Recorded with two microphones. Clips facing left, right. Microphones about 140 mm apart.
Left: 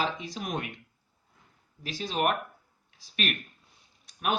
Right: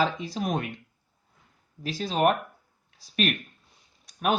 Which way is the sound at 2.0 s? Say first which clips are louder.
Right 5 dB; 35° right (ahead or behind).